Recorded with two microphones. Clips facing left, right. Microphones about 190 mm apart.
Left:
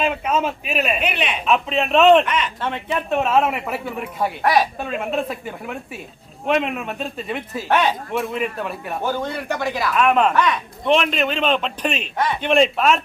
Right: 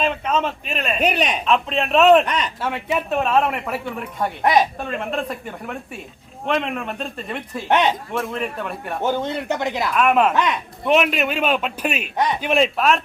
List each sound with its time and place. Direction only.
0.0 s a man's voice: 5° left (ahead or behind)
0.9 s a man's voice: 40° right (ahead or behind)
1.5 s a man's voice: 5° left (ahead or behind)
2.2 s a man's voice: 35° right (ahead or behind)
2.6 s a man's voice: 5° right (ahead or behind)
7.7 s speech: 20° right (ahead or behind)
8.1 s a man's voice: 5° left (ahead or behind)
9.0 s speech: 20° right (ahead or behind)
9.9 s a man's voice: centre (ahead or behind)
12.1 s speech: 20° right (ahead or behind)
12.4 s a man's voice: 5° right (ahead or behind)